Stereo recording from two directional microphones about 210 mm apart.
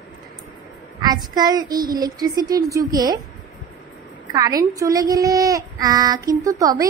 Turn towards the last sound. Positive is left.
turn(degrees=-15)  # may be behind; listen again after turning